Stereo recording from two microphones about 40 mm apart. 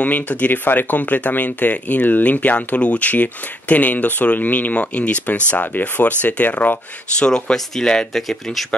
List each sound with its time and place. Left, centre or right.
0.0 s speech: left
7.2 s speech: left
7.5 s speech: centre